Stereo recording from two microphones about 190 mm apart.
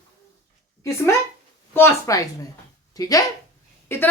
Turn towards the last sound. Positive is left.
turn(degrees=15)  # may be behind; listen again after turning